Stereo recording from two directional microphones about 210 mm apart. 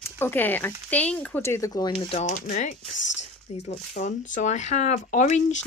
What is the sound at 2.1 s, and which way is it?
Speech, 35° left (ahead or behind).